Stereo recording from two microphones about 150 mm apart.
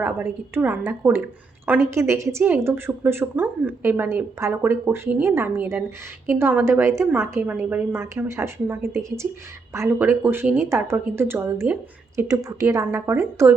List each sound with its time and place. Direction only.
0.0 s speech: 10° right (ahead or behind)